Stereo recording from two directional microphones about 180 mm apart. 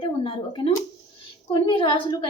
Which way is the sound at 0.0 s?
30° left (ahead or behind).